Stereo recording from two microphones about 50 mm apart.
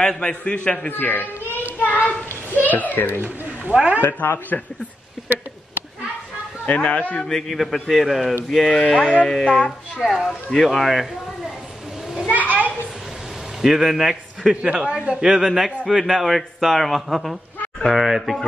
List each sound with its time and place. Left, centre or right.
0.0 s a man's voice: centre
0.8 s a child's voice: left
3.2 s speech: right
4.0 s speech: left
6.6 s speech: left
7.2 s a man's voice: centre
10.0 s speech: centre
12.3 s children playing: right
13.6 s a man's voice: centre
14.5 s speech: centre